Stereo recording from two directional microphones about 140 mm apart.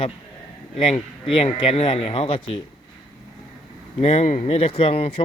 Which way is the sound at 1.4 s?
40° left (ahead or behind).